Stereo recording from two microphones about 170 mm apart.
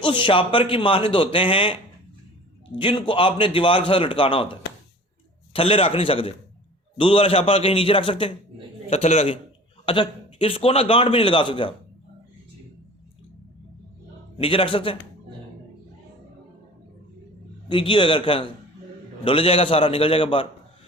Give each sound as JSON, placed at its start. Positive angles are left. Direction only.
{"t": 0.0, "sound": "a man's voice", "side_deg": 30}
{"t": 5.5, "sound": "a man's voice", "side_deg": 35}
{"t": 14.3, "sound": "a man's voice", "side_deg": 35}
{"t": 17.7, "sound": "a man's voice", "side_deg": 30}